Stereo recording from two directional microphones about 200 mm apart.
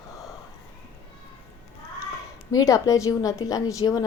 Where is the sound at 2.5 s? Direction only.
15° left (ahead or behind).